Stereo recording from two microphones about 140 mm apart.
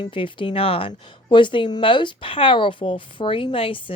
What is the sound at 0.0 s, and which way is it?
Speech, 35° left (ahead or behind).